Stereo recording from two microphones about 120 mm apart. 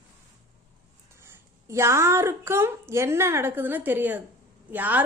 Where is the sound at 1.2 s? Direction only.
20° right (ahead or behind).